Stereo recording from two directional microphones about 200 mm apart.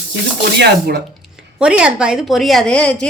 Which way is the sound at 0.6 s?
55° right (ahead or behind).